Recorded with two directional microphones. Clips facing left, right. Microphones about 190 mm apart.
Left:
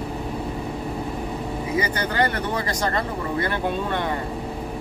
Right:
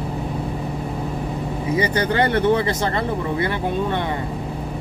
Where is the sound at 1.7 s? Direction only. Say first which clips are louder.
Right 4 dB; 25° right (ahead or behind).